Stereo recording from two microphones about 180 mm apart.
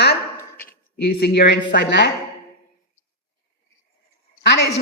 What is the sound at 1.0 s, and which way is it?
Speech, 65° left (ahead or behind).